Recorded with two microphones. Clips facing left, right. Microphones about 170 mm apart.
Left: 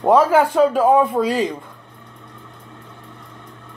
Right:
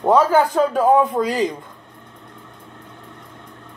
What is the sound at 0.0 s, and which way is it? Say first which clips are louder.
A man's voice: left 1 dB; 10° left (ahead or behind).